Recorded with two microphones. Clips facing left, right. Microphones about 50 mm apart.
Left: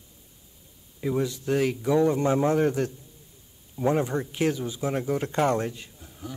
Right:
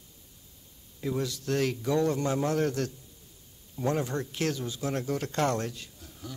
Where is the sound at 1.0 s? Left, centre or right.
Left.